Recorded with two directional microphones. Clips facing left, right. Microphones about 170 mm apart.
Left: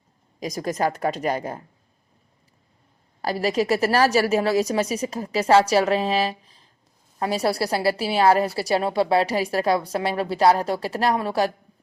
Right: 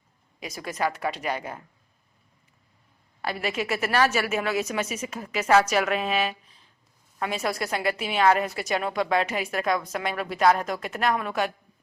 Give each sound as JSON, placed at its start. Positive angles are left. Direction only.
{"t": 0.3, "sound": "a woman's voice", "side_deg": 40}
{"t": 3.2, "sound": "a woman's voice", "side_deg": 35}